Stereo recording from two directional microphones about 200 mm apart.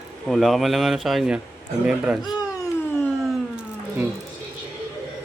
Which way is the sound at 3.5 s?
10° right (ahead or behind).